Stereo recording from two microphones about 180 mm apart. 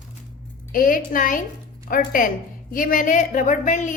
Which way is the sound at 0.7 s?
50° left (ahead or behind).